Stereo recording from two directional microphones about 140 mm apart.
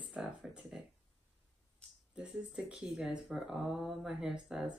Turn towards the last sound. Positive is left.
turn(degrees=-5)  # may be behind; listen again after turning